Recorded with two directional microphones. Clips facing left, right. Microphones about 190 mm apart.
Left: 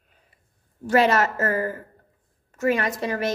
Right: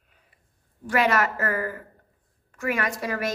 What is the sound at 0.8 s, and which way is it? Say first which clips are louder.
A woman's voice: left 4 dB; 30° left (ahead or behind).